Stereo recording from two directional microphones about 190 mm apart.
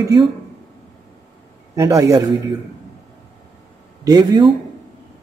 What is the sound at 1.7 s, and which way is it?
Speech, 15° right (ahead or behind).